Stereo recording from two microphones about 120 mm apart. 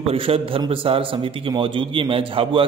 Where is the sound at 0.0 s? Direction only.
55° right (ahead or behind).